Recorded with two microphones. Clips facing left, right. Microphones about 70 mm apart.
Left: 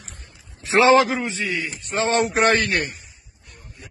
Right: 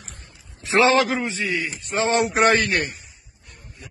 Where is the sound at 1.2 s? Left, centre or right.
Centre.